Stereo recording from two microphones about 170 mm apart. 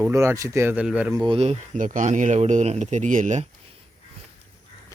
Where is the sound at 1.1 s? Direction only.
20° right (ahead or behind).